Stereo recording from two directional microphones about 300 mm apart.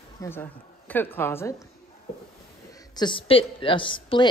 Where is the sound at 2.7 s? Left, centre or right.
Centre.